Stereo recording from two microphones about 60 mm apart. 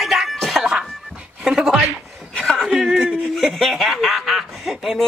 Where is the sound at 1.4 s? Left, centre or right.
Centre.